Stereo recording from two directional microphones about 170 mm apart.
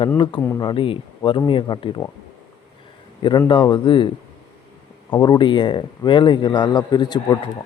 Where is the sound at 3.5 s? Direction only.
25° left (ahead or behind).